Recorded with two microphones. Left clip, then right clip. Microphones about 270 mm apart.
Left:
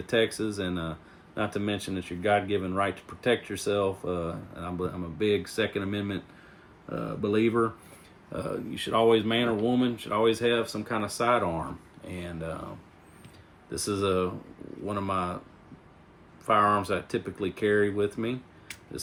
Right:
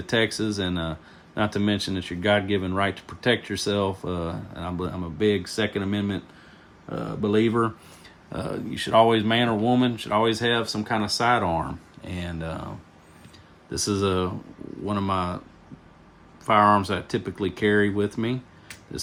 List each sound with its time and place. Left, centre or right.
0.0 s speech: right
13.7 s speech: right
16.5 s speech: right